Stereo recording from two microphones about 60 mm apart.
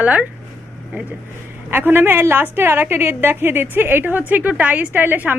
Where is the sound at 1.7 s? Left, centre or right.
Right.